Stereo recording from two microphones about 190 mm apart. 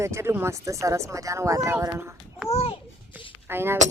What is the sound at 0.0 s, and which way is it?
Speech, 15° right (ahead or behind).